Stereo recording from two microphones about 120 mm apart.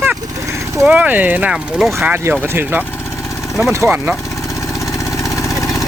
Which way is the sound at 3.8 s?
10° right (ahead or behind).